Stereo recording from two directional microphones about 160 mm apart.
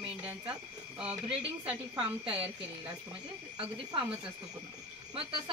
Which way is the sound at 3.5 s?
30° right (ahead or behind).